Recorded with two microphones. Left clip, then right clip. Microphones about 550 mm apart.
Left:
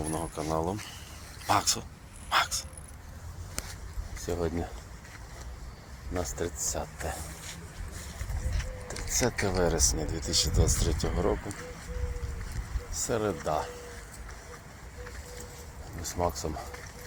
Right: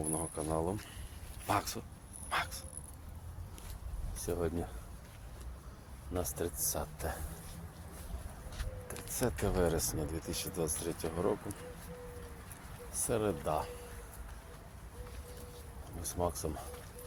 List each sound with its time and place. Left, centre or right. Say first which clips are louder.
0.0 s a sound: left 5 dB; right
1.5 s speech: left 8 dB; right
4.3 s speech: left 4 dB; right
6.1 s speech: left 4 dB; right
8.9 s speech: left 7 dB; right
12.9 s speech: left 4 dB; right
16.0 s speech: left 5 dB; right